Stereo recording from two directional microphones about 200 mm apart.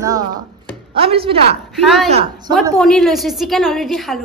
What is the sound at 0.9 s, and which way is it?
Speech, 25° right (ahead or behind).